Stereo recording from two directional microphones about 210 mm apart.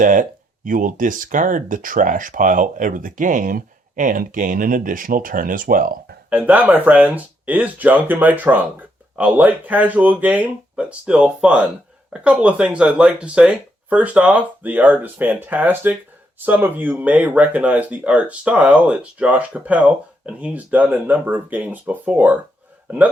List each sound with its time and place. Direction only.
0.0 s speech: 40° right (ahead or behind)
6.3 s speech: 5° right (ahead or behind)